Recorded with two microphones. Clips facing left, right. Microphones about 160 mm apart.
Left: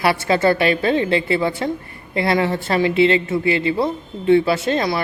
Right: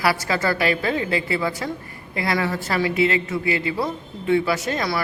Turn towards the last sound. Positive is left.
turn(degrees=25)  # may be behind; listen again after turning